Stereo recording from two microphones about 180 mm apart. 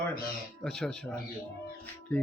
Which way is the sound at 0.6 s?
5° left (ahead or behind).